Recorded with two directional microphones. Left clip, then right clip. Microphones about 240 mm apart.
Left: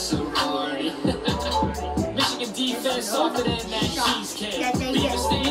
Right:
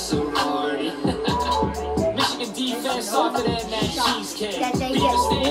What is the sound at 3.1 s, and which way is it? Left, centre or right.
Music, centre.